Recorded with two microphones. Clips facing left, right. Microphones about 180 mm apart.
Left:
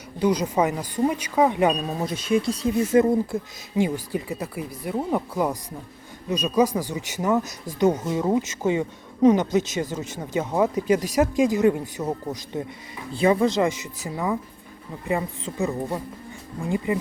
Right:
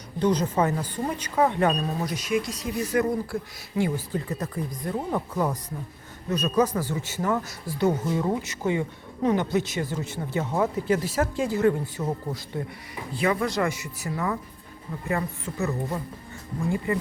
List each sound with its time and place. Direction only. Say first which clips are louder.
0.2 s speech: left 2 dB; 10° left (ahead or behind)
2.0 s speech: left 4 dB; 30° left (ahead or behind)